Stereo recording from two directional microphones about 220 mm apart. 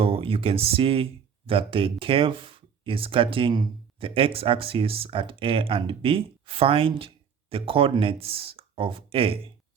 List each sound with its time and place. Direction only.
0.0 s speech: 25° right (ahead or behind)